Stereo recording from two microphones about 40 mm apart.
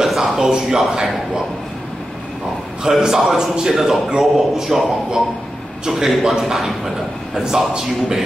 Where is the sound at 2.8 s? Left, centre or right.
Centre.